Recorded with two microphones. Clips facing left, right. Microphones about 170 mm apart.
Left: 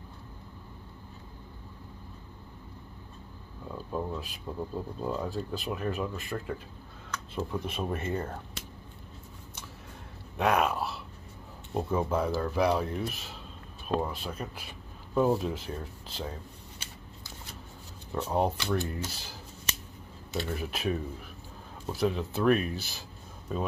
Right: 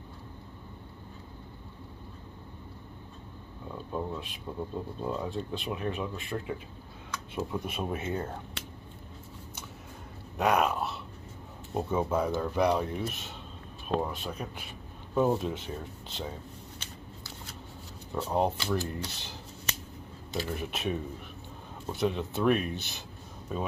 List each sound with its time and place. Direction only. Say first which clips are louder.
3.7 s speech: left 1 dB; centre (ahead or behind)
10.3 s speech: even; centre (ahead or behind)
18.3 s speech: even; centre (ahead or behind)
20.3 s speech: even; centre (ahead or behind)